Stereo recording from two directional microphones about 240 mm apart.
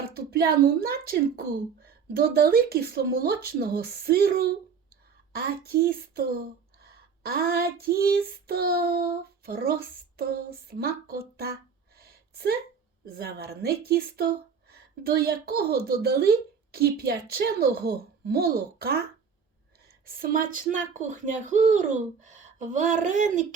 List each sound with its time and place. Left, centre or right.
0.3 s female singing: right
11.9 s a sound: right
13.1 s female singing: right
20.1 s female singing: right